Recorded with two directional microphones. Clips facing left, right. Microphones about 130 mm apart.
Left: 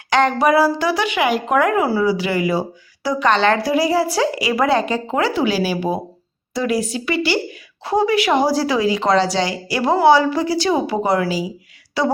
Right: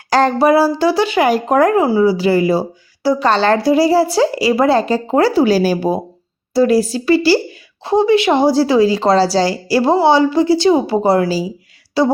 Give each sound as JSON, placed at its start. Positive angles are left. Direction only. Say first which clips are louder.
{"t": 0.1, "sound": "speech", "louder": "right 3 dB", "side_deg": -35}
{"t": 1.8, "sound": "speech", "louder": "right 5 dB", "side_deg": -20}